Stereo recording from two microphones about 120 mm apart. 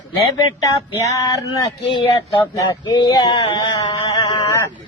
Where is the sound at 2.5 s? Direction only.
35° left (ahead or behind).